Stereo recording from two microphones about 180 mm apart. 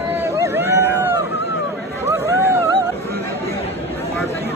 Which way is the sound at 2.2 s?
20° right (ahead or behind).